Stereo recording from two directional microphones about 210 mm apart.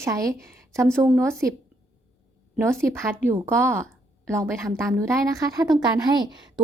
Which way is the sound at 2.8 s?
10° right (ahead or behind).